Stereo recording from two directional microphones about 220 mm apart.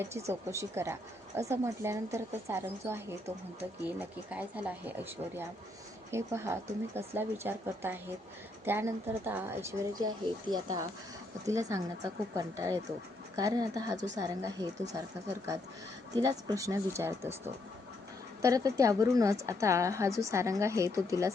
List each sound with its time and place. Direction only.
0.3 s a woman's voice: 10° right (ahead or behind)